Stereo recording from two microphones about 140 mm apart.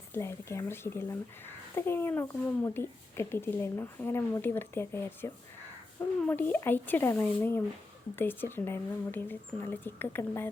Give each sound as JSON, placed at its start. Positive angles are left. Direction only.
{"t": 0.1, "sound": "a woman's voice", "side_deg": 20}